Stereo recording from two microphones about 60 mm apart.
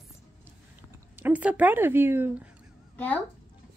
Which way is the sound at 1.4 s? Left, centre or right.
Right.